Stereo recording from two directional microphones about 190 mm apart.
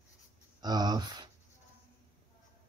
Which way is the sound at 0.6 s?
20° right (ahead or behind).